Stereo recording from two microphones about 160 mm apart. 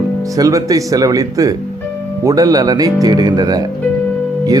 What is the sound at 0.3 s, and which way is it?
Speech, 20° right (ahead or behind).